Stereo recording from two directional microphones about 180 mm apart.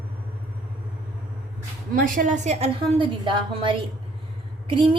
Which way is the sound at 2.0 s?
50° right (ahead or behind).